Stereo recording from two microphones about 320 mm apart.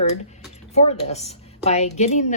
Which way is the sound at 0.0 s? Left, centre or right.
Centre.